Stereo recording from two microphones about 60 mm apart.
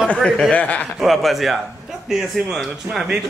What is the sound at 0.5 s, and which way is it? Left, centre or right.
Speech, centre.